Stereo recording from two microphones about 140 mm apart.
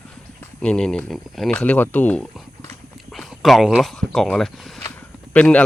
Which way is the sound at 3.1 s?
Centre (ahead or behind).